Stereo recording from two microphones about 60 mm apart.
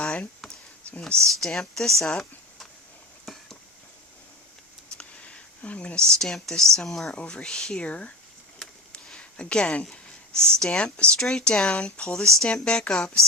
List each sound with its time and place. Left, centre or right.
0.0 s a sound: centre
1.0 s speech: centre
4.9 s speech: left; by 7.1 s centre
7.1 s speech: centre
8.9 s a sound: centre
9.9 s speech: centre